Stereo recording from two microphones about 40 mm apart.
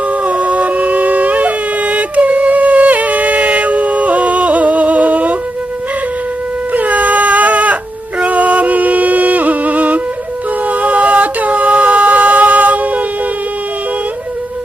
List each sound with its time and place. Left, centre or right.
0.1 s shofar: right
6.7 s goat: right
8.2 s music: right